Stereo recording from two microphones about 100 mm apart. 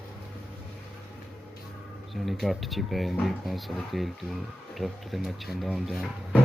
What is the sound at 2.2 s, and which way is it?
Speech, centre (ahead or behind).